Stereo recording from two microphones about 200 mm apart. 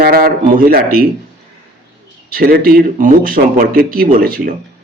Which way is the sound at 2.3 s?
50° right (ahead or behind).